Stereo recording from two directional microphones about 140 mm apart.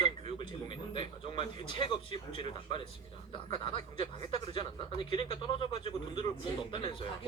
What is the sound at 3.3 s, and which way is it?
A man's voice, 35° left (ahead or behind).